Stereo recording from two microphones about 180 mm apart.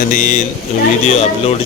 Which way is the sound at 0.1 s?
45° left (ahead or behind).